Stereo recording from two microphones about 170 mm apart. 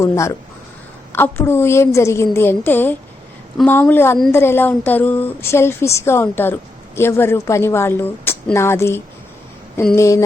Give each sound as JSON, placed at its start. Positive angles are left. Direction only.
{"t": 0.0, "sound": "speech", "side_deg": 15}